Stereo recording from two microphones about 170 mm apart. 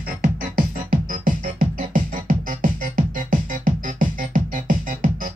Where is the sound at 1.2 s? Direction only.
50° right (ahead or behind).